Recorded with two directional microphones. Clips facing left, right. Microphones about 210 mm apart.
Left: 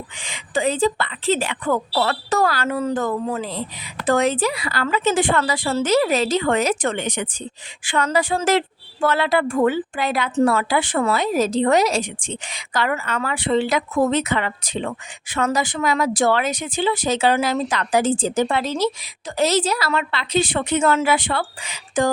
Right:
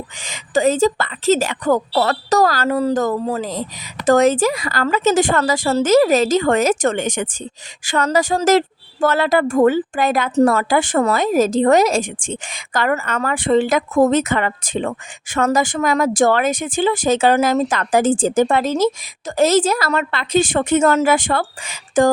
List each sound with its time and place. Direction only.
0.2 s a woman's voice: 40° right (ahead or behind)